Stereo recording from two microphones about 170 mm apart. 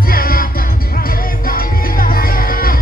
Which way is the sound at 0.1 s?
60° left (ahead or behind).